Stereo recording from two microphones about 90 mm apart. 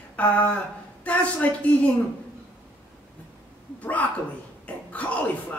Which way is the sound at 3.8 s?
15° left (ahead or behind).